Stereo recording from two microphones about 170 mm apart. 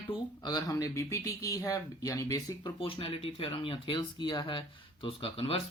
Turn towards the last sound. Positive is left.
turn(degrees=35)  # may be behind; listen again after turning